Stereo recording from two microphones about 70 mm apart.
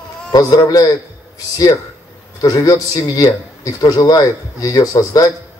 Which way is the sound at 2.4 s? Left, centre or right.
Left.